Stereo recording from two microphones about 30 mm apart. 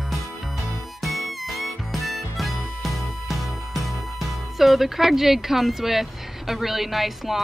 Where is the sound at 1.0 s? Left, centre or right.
Centre.